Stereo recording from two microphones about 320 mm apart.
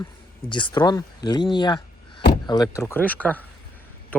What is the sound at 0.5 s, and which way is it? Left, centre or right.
Speech, centre.